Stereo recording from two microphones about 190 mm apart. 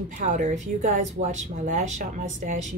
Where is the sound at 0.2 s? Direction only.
40° right (ahead or behind).